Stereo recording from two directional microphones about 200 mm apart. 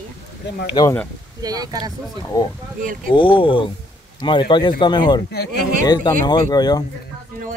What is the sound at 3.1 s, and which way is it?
Speech, 25° left (ahead or behind).